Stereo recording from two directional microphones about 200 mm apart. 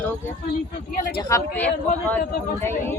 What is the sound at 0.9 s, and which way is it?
Speech, 45° left (ahead or behind).